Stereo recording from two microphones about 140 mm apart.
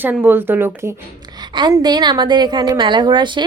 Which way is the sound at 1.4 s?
30° right (ahead or behind).